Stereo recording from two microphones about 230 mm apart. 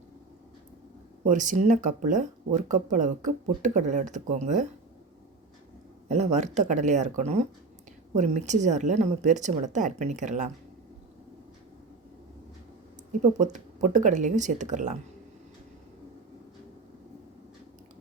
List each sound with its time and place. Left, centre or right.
1.2 s speech: right
6.1 s speech: right
13.4 s speech: right